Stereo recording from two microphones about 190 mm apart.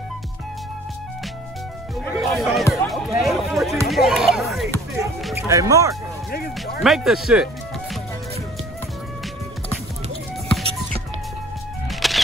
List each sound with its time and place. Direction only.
2.1 s speech: centre (ahead or behind)
2.7 s a sound: centre (ahead or behind)
3.8 s speech: centre (ahead or behind)
5.5 s speech: 15° right (ahead or behind)
6.8 s speech: centre (ahead or behind)
11.9 s music: centre (ahead or behind)